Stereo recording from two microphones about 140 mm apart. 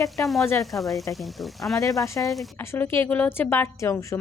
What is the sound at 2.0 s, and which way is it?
A woman's voice, 20° left (ahead or behind).